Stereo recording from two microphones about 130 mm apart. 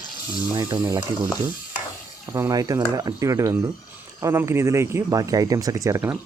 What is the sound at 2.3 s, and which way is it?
Speech, 25° right (ahead or behind).